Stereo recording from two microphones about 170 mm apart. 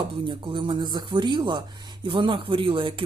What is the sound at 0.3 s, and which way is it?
Speech, 30° right (ahead or behind).